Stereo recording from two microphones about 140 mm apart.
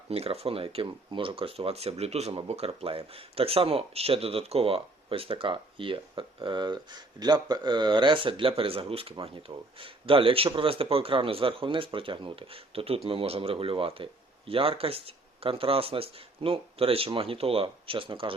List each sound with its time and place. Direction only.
0.1 s speech: 45° right (ahead or behind)